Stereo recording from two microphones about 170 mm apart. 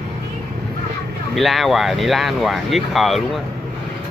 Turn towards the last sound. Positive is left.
turn(degrees=0)  # may be behind; listen again after turning